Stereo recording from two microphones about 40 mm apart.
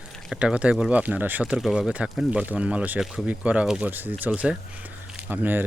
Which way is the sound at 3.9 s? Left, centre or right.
Right.